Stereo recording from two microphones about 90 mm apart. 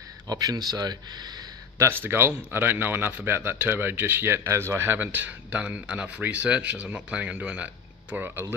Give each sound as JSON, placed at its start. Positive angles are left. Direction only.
{"t": 0.3, "sound": "speech", "side_deg": -45}
{"t": 2.0, "sound": "speech", "side_deg": -25}